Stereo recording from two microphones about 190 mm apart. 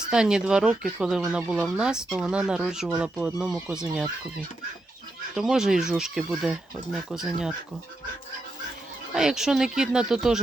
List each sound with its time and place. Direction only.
0.1 s speech: 5° right (ahead or behind)
5.3 s speech: centre (ahead or behind)
9.1 s speech: 5° right (ahead or behind)